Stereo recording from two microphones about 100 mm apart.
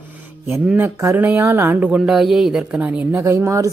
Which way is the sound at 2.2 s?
5° right (ahead or behind).